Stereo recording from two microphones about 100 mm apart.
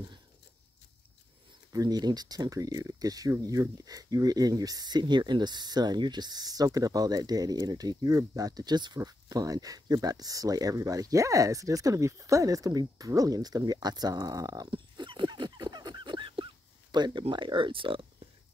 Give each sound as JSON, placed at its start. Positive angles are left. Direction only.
{"t": 1.7, "sound": "speech", "side_deg": -40}
{"t": 14.7, "sound": "dog", "side_deg": -55}
{"t": 16.9, "sound": "speech", "side_deg": -45}